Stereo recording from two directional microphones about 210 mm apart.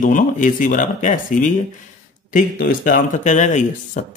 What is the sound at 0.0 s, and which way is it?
Speech, 40° left (ahead or behind).